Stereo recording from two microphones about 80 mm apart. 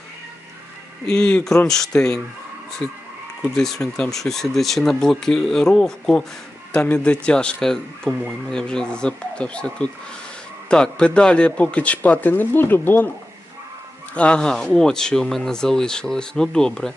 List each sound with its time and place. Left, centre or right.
1.0 s speech: centre
3.4 s speech: centre; by 13.1 s left
14.2 s speech: centre